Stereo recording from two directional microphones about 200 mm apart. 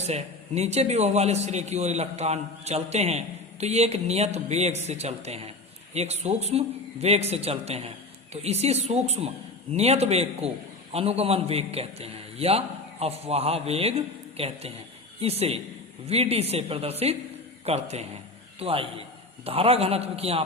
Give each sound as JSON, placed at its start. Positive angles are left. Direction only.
{"t": 0.0, "sound": "a man's voice", "side_deg": -35}